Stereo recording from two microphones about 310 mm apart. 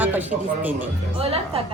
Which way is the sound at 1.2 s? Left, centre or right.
Centre.